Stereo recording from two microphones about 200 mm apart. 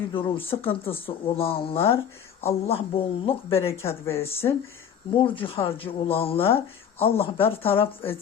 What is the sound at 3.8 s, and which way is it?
Speech, 15° left (ahead or behind).